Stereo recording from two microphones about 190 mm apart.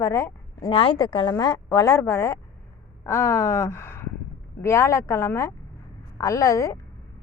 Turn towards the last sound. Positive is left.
turn(degrees=15)  # may be behind; listen again after turning